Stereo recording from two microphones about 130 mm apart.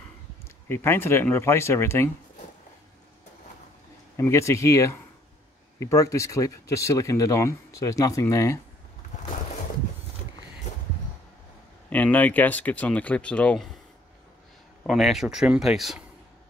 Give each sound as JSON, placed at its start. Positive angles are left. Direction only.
{"t": 0.7, "sound": "speech", "side_deg": 20}
{"t": 4.2, "sound": "speech", "side_deg": 20}
{"t": 11.9, "sound": "speech", "side_deg": 10}
{"t": 14.9, "sound": "speech", "side_deg": 0}